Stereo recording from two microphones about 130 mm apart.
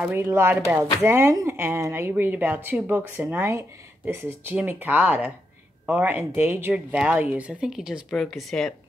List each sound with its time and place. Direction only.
0.0 s speech: 15° right (ahead or behind); by 8.7 s centre (ahead or behind)